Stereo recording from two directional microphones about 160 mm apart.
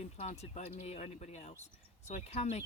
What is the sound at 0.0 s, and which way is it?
Speech, 40° left (ahead or behind).